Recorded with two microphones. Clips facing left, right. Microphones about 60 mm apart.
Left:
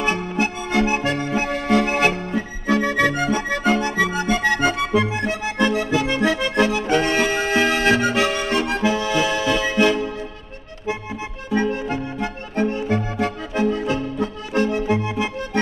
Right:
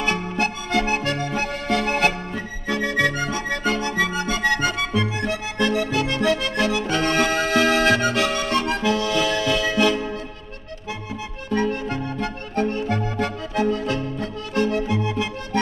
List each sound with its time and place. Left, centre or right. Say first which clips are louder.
0.0 s music: left 1 dB; centre
2.8 s music: right 1 dB; left
11.5 s music: left 1 dB; centre
14.9 s music: left 2 dB; left